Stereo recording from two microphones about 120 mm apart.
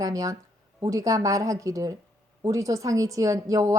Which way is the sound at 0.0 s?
30° right (ahead or behind).